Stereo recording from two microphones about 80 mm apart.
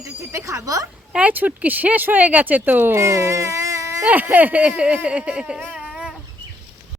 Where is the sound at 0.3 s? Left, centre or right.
Right.